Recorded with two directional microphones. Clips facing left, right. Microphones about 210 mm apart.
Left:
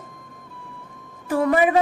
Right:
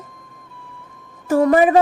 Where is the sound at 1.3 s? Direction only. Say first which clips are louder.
Right 5 dB; 40° right (ahead or behind).